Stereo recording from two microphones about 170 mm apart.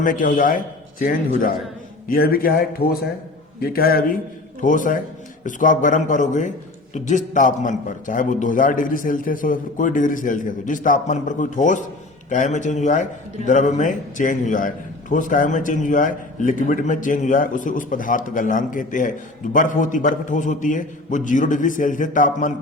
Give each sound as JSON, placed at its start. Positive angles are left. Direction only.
{"t": 0.0, "sound": "a man's voice", "side_deg": 50}
{"t": 4.6, "sound": "a man's voice", "side_deg": 50}